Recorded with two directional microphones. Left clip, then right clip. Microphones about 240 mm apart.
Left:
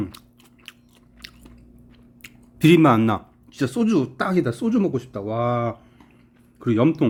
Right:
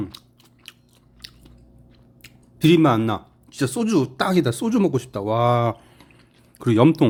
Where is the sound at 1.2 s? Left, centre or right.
Centre.